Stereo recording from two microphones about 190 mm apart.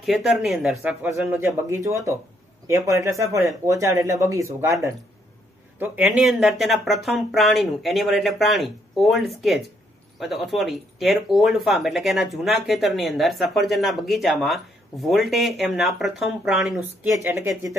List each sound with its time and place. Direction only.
0.0 s speech: centre (ahead or behind)
5.8 s speech: 5° right (ahead or behind)